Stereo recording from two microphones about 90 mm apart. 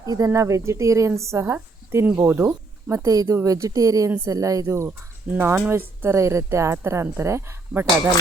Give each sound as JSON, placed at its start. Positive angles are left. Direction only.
{"t": 0.0, "sound": "speech", "side_deg": -40}
{"t": 2.9, "sound": "speech", "side_deg": -40}
{"t": 5.3, "sound": "speech", "side_deg": -20}